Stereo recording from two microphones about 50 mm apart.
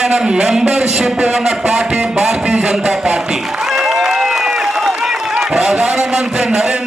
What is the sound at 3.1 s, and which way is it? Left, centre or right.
Applause, centre.